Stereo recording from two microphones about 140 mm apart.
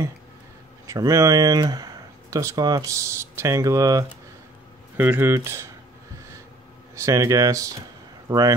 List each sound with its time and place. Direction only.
0.8 s speech: 25° right (ahead or behind)
4.9 s speech: 15° right (ahead or behind)
7.0 s speech: 25° right (ahead or behind)